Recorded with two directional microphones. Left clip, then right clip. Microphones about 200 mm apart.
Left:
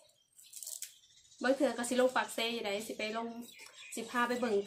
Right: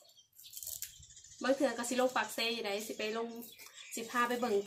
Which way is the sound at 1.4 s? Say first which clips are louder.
Left 1 dB; 20° left (ahead or behind).